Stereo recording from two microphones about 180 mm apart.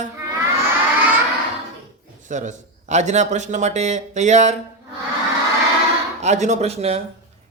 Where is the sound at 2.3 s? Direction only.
45° right (ahead or behind).